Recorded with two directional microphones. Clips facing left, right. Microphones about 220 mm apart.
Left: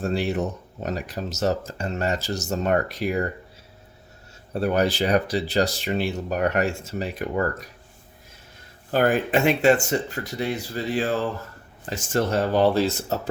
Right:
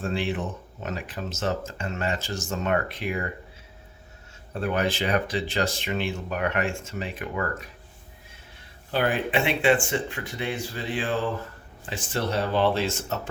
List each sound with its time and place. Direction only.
0.0 s speech: 40° left (ahead or behind)
4.5 s speech: 40° left (ahead or behind)
8.9 s speech: 45° left (ahead or behind)